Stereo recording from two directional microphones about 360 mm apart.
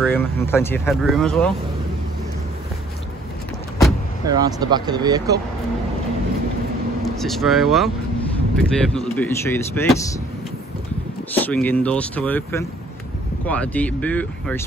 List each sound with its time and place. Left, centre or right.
0.0 s speech: centre
4.3 s speech: centre
7.2 s speech: centre
11.3 s speech: centre